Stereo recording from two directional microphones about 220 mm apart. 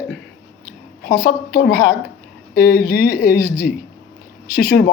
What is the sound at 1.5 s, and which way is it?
Speech, 50° left (ahead or behind).